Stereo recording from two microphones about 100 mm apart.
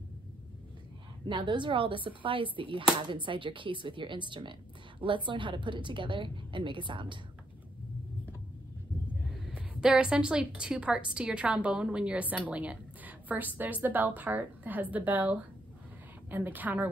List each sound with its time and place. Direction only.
1.2 s speech: 50° right (ahead or behind)
9.6 s a woman's voice: 10° right (ahead or behind)